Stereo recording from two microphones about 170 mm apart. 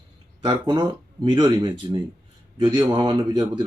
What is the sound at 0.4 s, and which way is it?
Speech, 25° right (ahead or behind).